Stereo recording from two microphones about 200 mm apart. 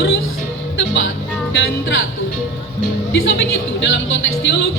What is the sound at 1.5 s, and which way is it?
Speech, 70° left (ahead or behind).